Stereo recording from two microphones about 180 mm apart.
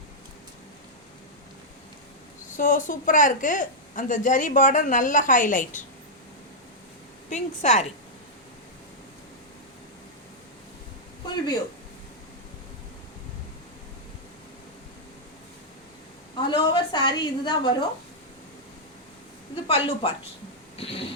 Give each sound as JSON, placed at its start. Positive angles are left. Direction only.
{"t": 2.5, "sound": "a woman's voice", "side_deg": 45}
{"t": 7.3, "sound": "speech", "side_deg": 40}
{"t": 16.5, "sound": "a sound", "side_deg": 25}
{"t": 19.6, "sound": "speech", "side_deg": 30}
{"t": 20.7, "sound": "cat", "side_deg": 30}